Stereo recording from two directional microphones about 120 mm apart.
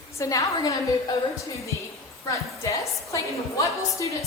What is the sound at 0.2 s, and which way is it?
Speech, 30° left (ahead or behind).